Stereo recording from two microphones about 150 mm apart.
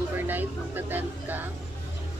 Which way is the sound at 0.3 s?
15° right (ahead or behind).